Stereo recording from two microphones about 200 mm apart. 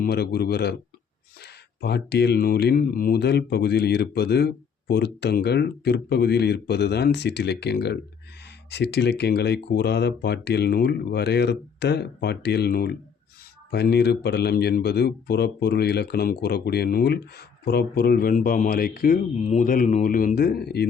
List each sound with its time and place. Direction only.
0.0 s speech: 55° left (ahead or behind)